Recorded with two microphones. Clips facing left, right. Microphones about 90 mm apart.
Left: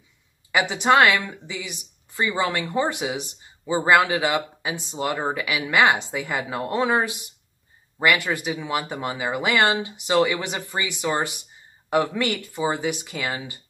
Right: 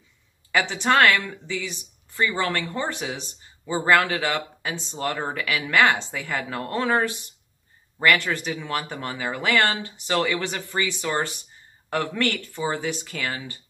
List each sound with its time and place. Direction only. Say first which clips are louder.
0.5 s speech: left 3 dB; 15° left (ahead or behind)